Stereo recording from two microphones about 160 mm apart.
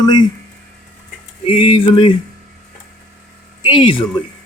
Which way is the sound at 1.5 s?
35° left (ahead or behind).